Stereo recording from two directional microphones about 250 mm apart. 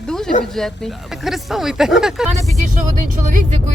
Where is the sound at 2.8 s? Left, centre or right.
Right.